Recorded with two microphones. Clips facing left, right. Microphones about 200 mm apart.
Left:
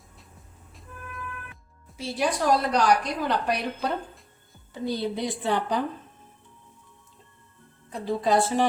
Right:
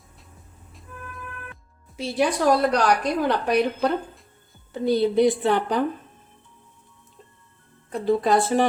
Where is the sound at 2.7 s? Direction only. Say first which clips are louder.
Right 2 dB; 60° right (ahead or behind).